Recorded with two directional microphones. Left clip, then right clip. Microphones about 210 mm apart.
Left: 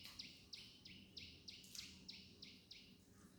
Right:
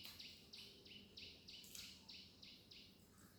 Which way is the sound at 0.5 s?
55° left (ahead or behind).